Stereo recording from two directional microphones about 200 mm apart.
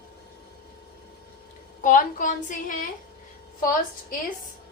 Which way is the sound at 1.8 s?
40° left (ahead or behind).